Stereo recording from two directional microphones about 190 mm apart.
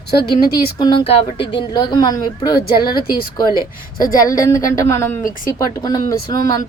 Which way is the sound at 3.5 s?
50° left (ahead or behind).